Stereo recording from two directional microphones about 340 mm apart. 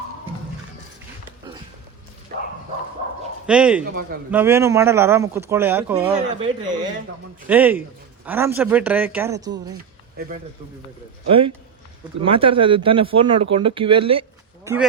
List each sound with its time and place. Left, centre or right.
3.4 s speech: centre
6.1 s a man's voice: centre
11.3 s speech: centre